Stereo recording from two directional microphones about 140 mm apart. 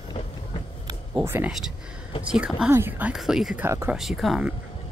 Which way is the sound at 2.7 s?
15° right (ahead or behind).